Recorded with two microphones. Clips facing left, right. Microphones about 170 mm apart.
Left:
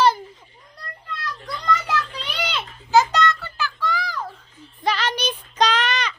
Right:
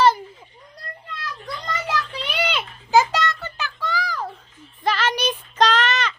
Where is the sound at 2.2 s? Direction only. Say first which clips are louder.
Right 3 dB; 10° right (ahead or behind).